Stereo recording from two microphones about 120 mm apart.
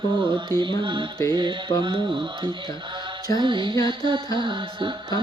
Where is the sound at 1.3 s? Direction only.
40° right (ahead or behind).